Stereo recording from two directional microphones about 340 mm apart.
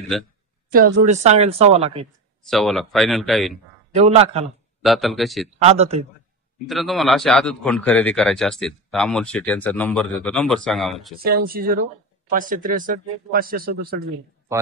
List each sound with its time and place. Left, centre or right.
0.1 s a man's voice: centre
0.7 s speech: right
2.4 s a man's voice: centre
3.9 s a man's voice: centre
4.8 s a man's voice: centre
5.6 s a man's voice: centre
6.6 s a man's voice: centre
11.2 s speech: right